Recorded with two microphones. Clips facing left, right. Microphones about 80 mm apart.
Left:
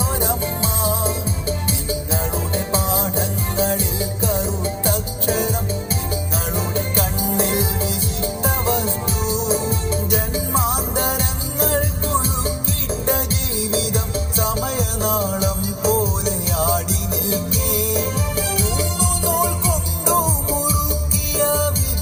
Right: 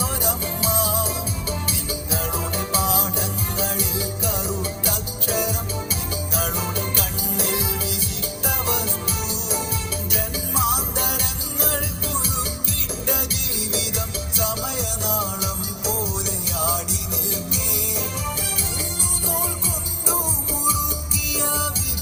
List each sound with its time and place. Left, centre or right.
0.2 s music: left